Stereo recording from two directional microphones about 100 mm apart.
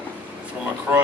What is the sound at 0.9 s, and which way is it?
Speech, 20° right (ahead or behind).